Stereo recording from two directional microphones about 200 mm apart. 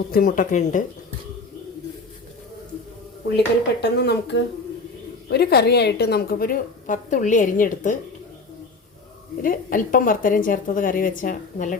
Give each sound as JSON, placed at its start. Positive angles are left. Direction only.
{"t": 0.1, "sound": "a woman's voice", "side_deg": 45}
{"t": 3.3, "sound": "a woman's voice", "side_deg": 55}
{"t": 9.4, "sound": "a woman's voice", "side_deg": 45}